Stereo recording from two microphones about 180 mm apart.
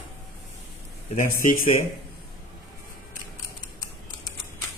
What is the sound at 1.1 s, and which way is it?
Speech, 50° left (ahead or behind).